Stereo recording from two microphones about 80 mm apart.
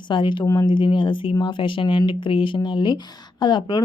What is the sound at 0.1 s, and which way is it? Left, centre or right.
Speech, left.